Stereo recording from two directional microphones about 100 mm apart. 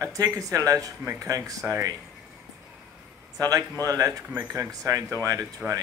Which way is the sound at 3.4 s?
35° right (ahead or behind).